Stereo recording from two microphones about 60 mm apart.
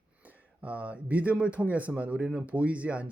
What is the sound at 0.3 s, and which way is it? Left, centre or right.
Speech, right.